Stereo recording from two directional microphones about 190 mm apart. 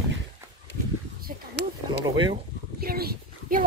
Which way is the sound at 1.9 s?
25° right (ahead or behind).